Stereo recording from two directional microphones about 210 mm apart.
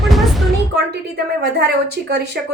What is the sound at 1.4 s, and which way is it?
Speech, 50° right (ahead or behind).